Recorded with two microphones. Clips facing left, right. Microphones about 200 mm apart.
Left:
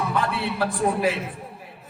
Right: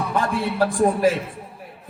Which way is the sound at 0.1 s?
45° right (ahead or behind).